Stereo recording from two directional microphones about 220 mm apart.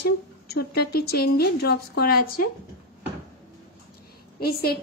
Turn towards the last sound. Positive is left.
turn(degrees=45)  # may be behind; listen again after turning